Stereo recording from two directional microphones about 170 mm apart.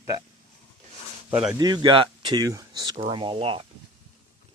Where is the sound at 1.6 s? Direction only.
25° right (ahead or behind).